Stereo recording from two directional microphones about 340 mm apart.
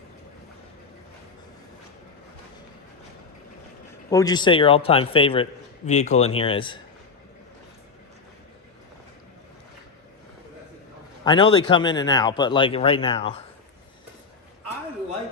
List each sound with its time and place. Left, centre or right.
4.1 s speech: centre
11.2 s speech: centre